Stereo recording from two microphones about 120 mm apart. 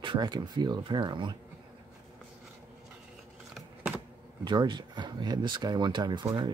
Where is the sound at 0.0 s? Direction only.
40° right (ahead or behind).